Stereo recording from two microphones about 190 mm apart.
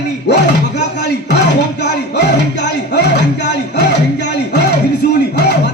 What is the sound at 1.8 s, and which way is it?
Music, 65° left (ahead or behind).